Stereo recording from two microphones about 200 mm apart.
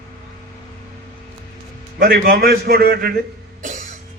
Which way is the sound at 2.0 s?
50° right (ahead or behind).